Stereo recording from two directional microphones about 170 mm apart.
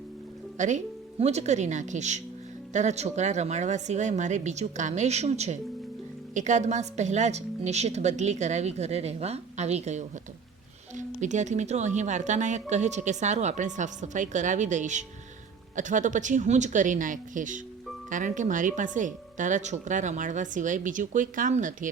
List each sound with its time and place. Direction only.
0.5 s a woman's voice: 45° right (ahead or behind)